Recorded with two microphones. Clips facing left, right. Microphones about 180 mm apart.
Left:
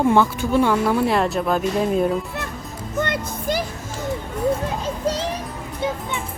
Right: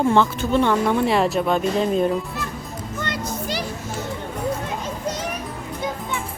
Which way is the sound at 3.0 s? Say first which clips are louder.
Left 3 dB; 55° left (ahead or behind).